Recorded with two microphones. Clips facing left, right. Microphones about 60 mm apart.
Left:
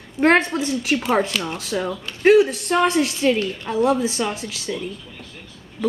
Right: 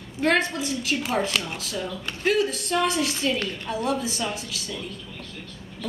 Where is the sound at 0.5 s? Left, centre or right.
Left.